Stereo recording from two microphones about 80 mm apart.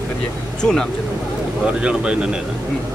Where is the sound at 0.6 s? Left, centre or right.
Centre.